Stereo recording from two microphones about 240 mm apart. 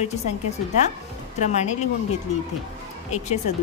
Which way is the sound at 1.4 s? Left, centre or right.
Left.